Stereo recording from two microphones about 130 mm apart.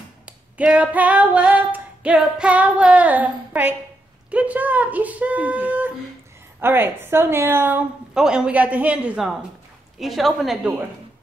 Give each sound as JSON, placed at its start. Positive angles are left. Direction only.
{"t": 0.6, "sound": "female singing", "side_deg": -10}
{"t": 8.1, "sound": "female singing", "side_deg": -5}
{"t": 9.9, "sound": "a woman's voice", "side_deg": 0}